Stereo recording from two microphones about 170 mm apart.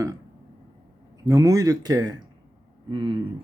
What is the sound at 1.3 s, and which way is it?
A man's voice, 20° right (ahead or behind).